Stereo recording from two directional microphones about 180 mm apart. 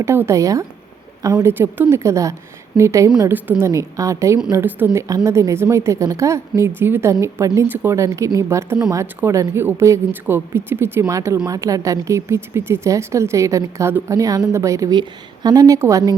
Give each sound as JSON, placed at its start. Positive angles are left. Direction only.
{"t": 0.0, "sound": "a woman's voice", "side_deg": -15}